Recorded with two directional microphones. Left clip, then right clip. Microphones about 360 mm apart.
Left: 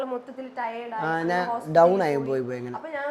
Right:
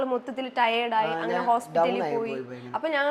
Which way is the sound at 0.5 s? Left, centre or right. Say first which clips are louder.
Right 8 dB; right.